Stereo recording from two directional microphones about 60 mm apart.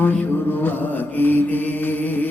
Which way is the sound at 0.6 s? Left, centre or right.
Left.